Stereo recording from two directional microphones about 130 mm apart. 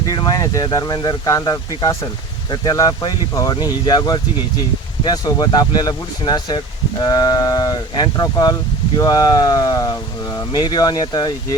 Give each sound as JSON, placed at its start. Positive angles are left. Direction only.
{"t": 0.1, "sound": "speech", "side_deg": 30}